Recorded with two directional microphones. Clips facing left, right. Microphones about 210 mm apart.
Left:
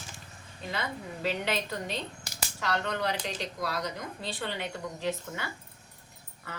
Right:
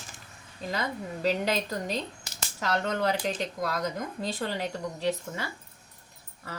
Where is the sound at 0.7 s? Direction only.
40° right (ahead or behind).